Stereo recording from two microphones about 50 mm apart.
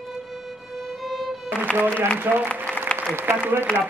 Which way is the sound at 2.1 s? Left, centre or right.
Right.